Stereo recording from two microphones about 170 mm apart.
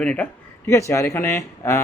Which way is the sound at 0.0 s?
5° left (ahead or behind).